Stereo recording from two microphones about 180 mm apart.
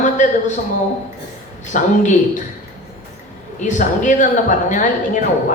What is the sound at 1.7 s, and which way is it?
Speech, 45° left (ahead or behind).